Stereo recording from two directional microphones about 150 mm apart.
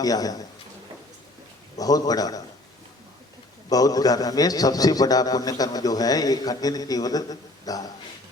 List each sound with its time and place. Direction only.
0.0 s a man's voice: 25° left (ahead or behind)
1.8 s a man's voice: 25° left (ahead or behind)
3.7 s a man's voice: 25° left (ahead or behind)